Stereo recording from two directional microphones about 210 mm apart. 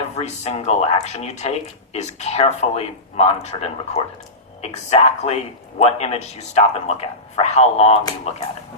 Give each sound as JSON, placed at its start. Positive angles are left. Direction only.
{"t": 0.2, "sound": "speech", "side_deg": 30}